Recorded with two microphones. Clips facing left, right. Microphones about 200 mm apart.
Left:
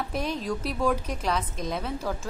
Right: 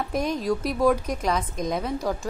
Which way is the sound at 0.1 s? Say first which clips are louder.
Right 7 dB; 10° right (ahead or behind).